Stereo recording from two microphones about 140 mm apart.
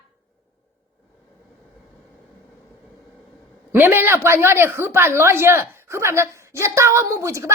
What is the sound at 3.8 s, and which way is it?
A woman's voice, 15° right (ahead or behind).